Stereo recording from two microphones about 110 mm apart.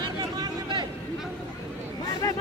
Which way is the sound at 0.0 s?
40° right (ahead or behind).